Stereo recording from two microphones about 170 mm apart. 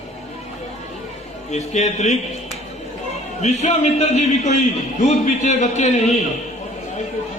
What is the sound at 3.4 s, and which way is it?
A man's voice, 40° left (ahead or behind).